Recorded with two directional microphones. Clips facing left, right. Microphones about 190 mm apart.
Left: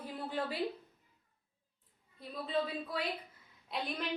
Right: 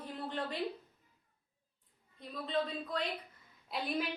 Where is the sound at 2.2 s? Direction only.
5° left (ahead or behind).